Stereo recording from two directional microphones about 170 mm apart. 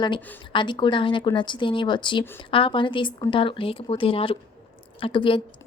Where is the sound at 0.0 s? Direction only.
30° left (ahead or behind).